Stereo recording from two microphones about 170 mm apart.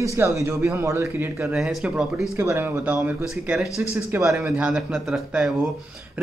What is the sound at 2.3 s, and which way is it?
A man's voice, 15° right (ahead or behind).